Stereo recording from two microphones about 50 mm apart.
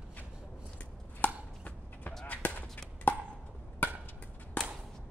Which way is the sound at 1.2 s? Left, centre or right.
Left.